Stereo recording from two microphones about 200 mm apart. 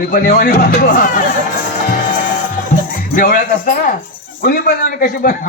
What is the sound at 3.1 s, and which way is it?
Speech, 45° left (ahead or behind).